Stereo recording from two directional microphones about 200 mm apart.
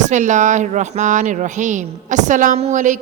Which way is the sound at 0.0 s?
40° right (ahead or behind).